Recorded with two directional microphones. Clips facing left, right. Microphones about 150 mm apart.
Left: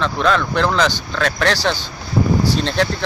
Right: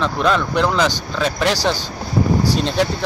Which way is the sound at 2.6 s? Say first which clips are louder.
Even; 5° right (ahead or behind).